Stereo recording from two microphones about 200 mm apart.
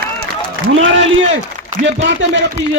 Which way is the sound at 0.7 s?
70° right (ahead or behind).